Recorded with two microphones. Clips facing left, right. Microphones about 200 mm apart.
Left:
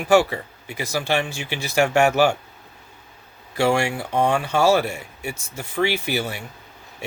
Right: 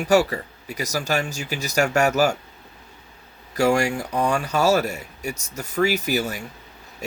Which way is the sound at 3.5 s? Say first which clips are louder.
Right 1 dB; 40° right (ahead or behind).